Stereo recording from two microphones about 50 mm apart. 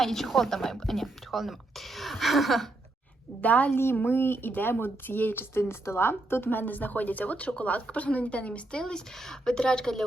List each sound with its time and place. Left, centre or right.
0.0 s a woman's voice: centre
3.4 s speech: left
4.0 s a woman's voice: left
8.8 s speech: centre